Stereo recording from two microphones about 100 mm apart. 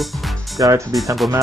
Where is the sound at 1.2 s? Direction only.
Centre (ahead or behind).